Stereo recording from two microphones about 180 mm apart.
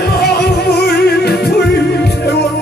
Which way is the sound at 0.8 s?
65° left (ahead or behind).